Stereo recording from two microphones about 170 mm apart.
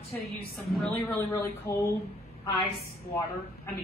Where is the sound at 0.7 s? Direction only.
5° left (ahead or behind).